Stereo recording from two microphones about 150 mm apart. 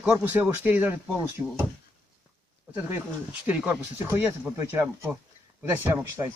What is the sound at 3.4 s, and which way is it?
Speech, 10° right (ahead or behind).